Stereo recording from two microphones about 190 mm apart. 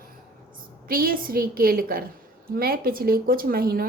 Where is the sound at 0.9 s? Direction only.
50° right (ahead or behind).